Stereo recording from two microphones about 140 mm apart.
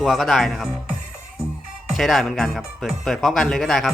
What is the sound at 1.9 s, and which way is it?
Speech, centre (ahead or behind).